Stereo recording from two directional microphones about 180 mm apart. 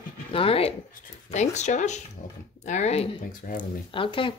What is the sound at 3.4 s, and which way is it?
Speech, 50° left (ahead or behind).